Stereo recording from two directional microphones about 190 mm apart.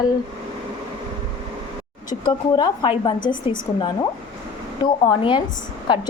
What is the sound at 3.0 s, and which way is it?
Speech, 25° left (ahead or behind).